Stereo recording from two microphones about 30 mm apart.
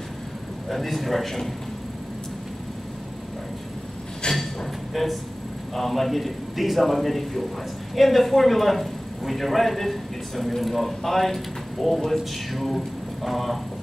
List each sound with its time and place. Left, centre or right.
0.7 s a man's voice: centre
4.2 s a sound: left
4.9 s a man's voice: centre